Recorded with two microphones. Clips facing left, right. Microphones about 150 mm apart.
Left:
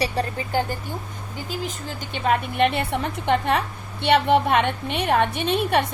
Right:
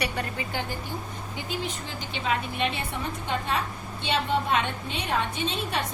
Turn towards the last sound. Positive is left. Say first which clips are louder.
# left 8 dB
turn(degrees=60)  # may be behind; listen again after turning